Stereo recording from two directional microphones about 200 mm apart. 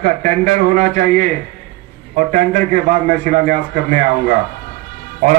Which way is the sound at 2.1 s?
40° right (ahead or behind).